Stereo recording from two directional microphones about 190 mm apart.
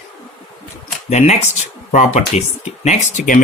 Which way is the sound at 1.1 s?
35° left (ahead or behind).